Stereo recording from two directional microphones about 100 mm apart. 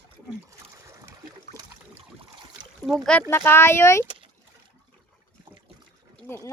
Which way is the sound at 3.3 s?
25° left (ahead or behind).